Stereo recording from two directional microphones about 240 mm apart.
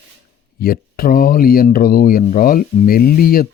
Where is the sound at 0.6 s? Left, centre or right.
Left.